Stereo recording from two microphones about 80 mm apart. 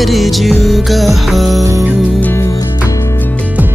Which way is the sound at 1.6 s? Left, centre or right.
Right.